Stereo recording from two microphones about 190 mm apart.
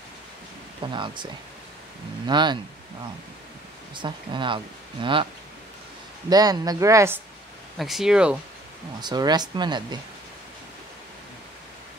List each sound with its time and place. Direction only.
0.9 s speech: 25° right (ahead or behind)
3.9 s speech: 25° right (ahead or behind)
7.7 s speech: centre (ahead or behind)
9.0 s speech: 20° right (ahead or behind)